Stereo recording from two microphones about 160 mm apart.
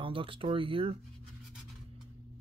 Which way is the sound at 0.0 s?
35° right (ahead or behind).